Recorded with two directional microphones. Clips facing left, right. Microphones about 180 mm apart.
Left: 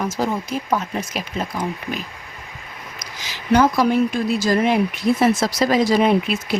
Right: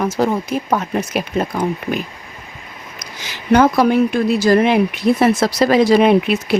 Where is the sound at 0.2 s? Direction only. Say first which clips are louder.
Right 5 dB; 60° right (ahead or behind).